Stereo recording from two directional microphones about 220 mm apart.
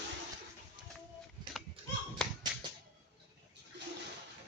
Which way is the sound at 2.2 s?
5° left (ahead or behind).